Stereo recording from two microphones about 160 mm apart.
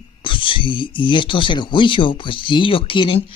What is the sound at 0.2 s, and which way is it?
Speech, 30° left (ahead or behind).